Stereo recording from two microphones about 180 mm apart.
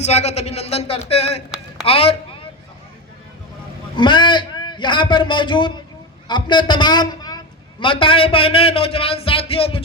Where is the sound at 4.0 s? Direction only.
25° left (ahead or behind).